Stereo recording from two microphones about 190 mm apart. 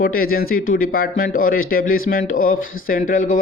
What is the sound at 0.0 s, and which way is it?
Speech, 50° left (ahead or behind).